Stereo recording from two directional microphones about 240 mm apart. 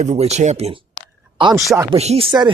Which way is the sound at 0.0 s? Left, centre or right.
Right.